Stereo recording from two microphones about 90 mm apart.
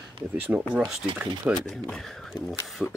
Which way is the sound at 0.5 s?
15° right (ahead or behind).